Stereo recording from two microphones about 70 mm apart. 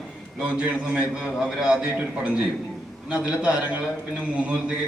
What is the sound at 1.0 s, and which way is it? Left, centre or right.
A man's voice, centre.